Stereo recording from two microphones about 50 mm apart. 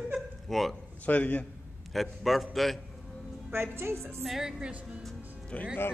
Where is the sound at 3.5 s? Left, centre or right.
Right.